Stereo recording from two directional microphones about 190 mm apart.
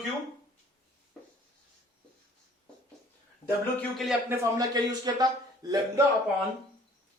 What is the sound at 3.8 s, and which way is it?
Speech, centre (ahead or behind).